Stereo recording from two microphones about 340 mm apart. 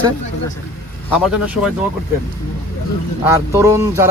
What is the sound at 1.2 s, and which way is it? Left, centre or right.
Speech, centre.